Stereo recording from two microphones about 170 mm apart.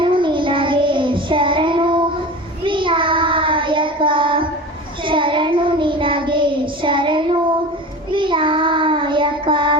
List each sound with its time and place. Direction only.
0.0 s child singing: 30° right (ahead or behind)